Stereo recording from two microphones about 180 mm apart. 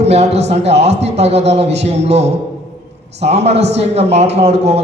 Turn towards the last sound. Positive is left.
turn(degrees=-35)  # may be behind; listen again after turning